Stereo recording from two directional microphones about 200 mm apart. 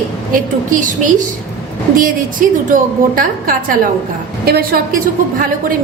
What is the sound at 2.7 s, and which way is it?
A woman's voice, 45° right (ahead or behind).